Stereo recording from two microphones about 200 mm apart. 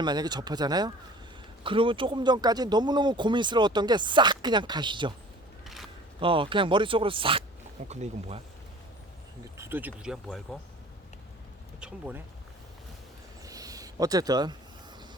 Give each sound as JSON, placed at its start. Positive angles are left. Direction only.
{"t": 0.0, "sound": "speech", "side_deg": -20}
{"t": 6.1, "sound": "speech", "side_deg": -25}
{"t": 9.6, "sound": "speech", "side_deg": -10}
{"t": 11.8, "sound": "speech", "side_deg": -5}
{"t": 13.4, "sound": "a sound", "side_deg": -15}